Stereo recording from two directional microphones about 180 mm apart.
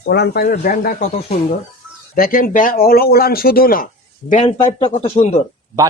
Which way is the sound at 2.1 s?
55° left (ahead or behind).